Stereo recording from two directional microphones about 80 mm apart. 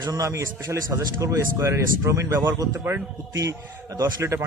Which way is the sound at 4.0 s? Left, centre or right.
Right.